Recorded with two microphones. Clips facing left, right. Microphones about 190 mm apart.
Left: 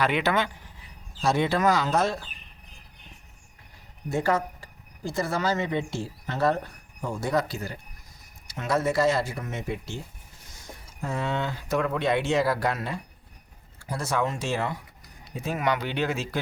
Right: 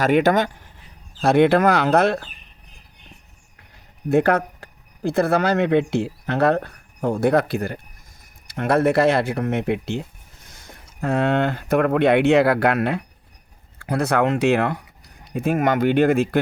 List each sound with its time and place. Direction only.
0.0 s speech: 45° right (ahead or behind)
1.2 s speech: 60° right (ahead or behind)
4.1 s speech: 60° right (ahead or behind)